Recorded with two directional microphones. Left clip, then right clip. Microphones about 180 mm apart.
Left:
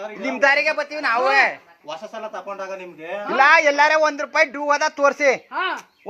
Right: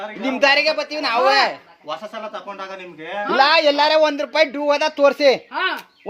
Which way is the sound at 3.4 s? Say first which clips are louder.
Left 1 dB; 20° right (ahead or behind).